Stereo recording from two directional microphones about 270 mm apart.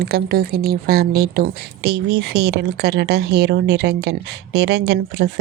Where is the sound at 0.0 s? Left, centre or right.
Right.